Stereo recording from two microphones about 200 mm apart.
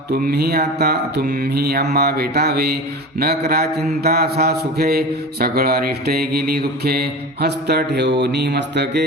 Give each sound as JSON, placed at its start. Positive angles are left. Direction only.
{"t": 0.1, "sound": "a man's voice", "side_deg": -50}
{"t": 8.2, "sound": "mantra", "side_deg": -60}